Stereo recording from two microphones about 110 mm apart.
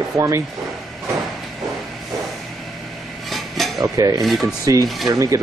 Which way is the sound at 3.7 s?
30° right (ahead or behind).